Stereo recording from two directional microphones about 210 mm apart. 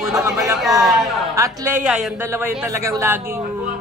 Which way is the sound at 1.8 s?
5° right (ahead or behind).